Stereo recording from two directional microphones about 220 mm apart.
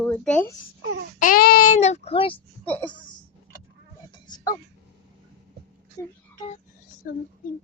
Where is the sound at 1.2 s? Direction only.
40° left (ahead or behind); by 2.4 s 25° left (ahead or behind).